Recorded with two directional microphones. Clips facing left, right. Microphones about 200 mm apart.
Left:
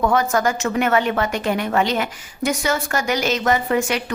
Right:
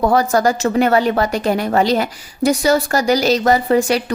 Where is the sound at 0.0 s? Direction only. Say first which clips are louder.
Right 4 dB; 35° right (ahead or behind).